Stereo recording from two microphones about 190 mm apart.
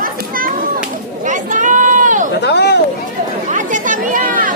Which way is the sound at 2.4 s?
60° left (ahead or behind).